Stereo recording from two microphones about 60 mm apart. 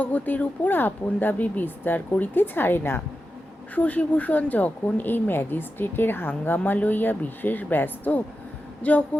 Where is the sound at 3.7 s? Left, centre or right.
Left.